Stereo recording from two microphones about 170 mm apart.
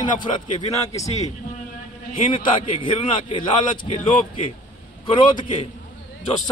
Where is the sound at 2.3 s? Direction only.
30° left (ahead or behind).